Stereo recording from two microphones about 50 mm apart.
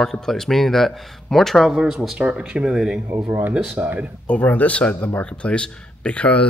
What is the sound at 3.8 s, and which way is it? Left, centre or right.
Speech, right.